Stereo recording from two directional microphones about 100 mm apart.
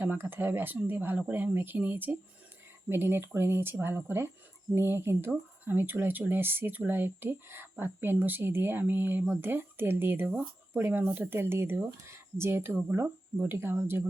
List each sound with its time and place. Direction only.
0.0 s speech: 20° right (ahead or behind)